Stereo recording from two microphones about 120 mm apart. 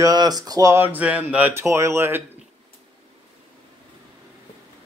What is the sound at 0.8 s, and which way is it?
Speech, 15° right (ahead or behind).